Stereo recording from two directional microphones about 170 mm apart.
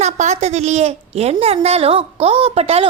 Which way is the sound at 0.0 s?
40° right (ahead or behind).